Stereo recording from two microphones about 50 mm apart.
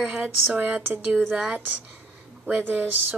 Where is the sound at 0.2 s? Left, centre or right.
Right.